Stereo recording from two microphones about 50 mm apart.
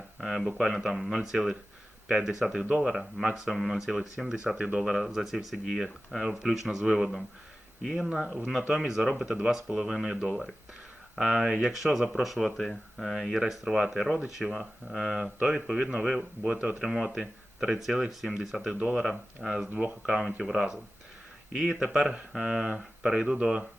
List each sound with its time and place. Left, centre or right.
0.2 s speech: centre
2.6 s speech: right
2.9 s speech: centre; by 16.7 s right
16.8 s speech: centre
18.8 s speech: centre